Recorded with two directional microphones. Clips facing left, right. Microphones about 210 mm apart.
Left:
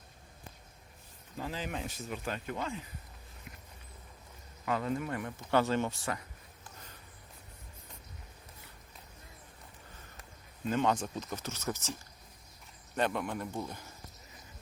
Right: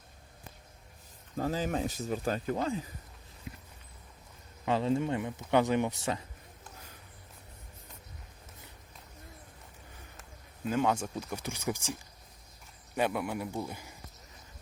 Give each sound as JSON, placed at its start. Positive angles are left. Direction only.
{"t": 1.4, "sound": "speech", "side_deg": -40}
{"t": 3.5, "sound": "walk", "side_deg": -30}
{"t": 4.6, "sound": "speech", "side_deg": -25}
{"t": 10.2, "sound": "speech", "side_deg": -5}
{"t": 13.0, "sound": "a man's voice", "side_deg": -10}